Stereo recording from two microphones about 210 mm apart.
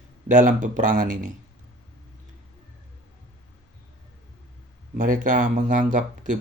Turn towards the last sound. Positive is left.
turn(degrees=-35)  # may be behind; listen again after turning